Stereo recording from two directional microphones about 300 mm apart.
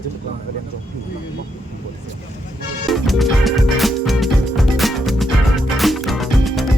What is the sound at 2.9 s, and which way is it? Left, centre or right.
Music, centre.